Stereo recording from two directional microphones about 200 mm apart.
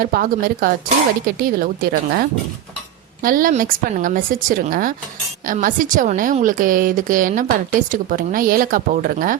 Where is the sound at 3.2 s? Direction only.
45° right (ahead or behind).